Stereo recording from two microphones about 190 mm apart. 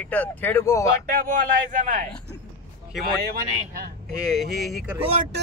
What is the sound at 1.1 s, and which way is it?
Speech, 45° right (ahead or behind).